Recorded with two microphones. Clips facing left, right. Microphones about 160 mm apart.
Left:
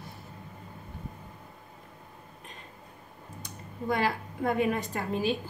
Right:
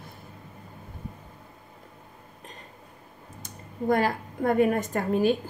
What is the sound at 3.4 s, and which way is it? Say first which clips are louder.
A woman's voice: right 5 dB; 45° right (ahead or behind).